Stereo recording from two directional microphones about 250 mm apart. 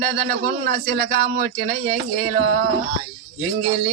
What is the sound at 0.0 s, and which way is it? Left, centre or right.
A man's voice, right.